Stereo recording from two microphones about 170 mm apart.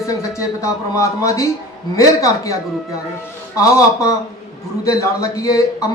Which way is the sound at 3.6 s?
20° left (ahead or behind).